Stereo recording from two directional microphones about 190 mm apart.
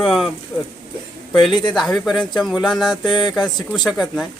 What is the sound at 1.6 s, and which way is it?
Speech, centre (ahead or behind).